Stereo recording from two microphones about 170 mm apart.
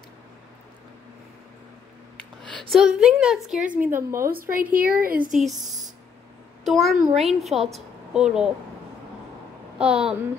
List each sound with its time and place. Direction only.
2.7 s a woman's voice: 5° right (ahead or behind)
4.3 s speech: 55° right (ahead or behind)
6.6 s a woman's voice: centre (ahead or behind)
9.8 s a woman's voice: 5° right (ahead or behind)